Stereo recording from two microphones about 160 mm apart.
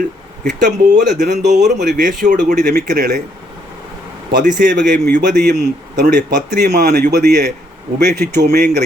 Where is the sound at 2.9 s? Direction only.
90° right.